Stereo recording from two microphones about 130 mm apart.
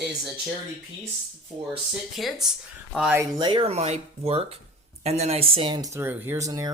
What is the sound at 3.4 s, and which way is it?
Speech, 35° right (ahead or behind).